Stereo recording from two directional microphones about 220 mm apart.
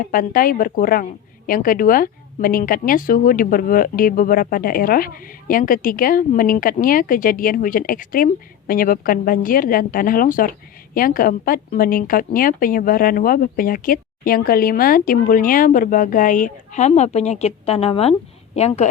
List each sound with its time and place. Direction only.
0.0 s a woman's voice: 40° left (ahead or behind)